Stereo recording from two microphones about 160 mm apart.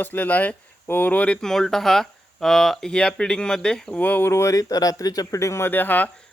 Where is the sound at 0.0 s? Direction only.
10° left (ahead or behind).